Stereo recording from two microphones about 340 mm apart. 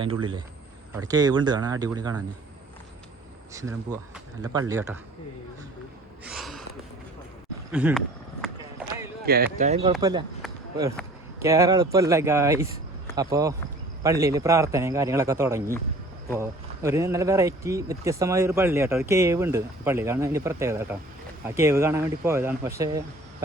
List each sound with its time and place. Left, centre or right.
0.0 s speech: centre
3.5 s speech: centre
6.2 s gasp: centre
7.7 s a sound: centre
9.2 s speech: right; by 10.2 s centre
11.4 s speech: centre